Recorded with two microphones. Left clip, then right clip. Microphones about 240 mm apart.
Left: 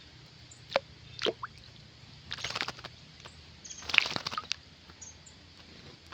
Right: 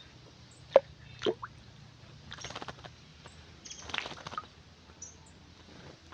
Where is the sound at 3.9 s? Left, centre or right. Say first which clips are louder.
Left 10 dB; left.